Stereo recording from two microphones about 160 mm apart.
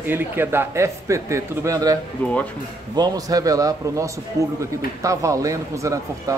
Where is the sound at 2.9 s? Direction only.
25° right (ahead or behind).